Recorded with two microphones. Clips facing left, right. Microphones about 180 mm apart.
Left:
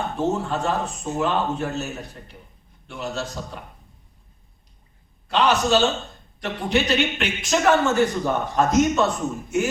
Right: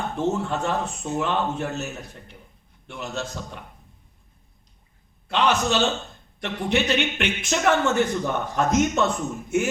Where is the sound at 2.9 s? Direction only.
40° left (ahead or behind).